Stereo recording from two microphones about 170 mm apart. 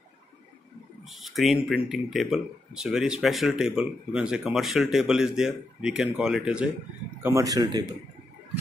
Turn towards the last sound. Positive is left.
turn(degrees=-20)  # may be behind; listen again after turning